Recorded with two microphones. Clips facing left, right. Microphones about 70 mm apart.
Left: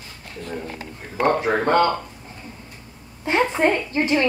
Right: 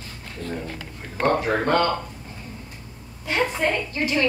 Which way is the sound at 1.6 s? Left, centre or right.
Centre.